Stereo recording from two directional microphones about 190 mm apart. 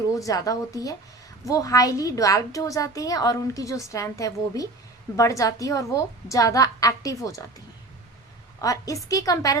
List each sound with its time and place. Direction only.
0.2 s a woman's voice: 20° left (ahead or behind)
8.6 s a woman's voice: 20° left (ahead or behind)